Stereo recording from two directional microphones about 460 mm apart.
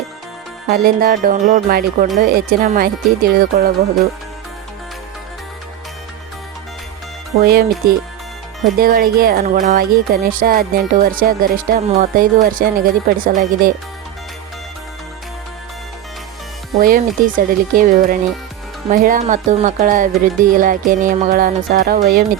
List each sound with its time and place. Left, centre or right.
0.7 s speech: centre
7.4 s speech: centre
16.8 s speech: centre